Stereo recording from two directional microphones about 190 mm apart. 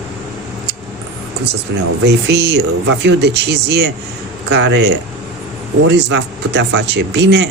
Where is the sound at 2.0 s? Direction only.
60° right (ahead or behind).